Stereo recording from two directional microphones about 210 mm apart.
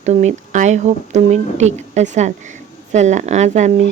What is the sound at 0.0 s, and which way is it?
Speech, 35° right (ahead or behind).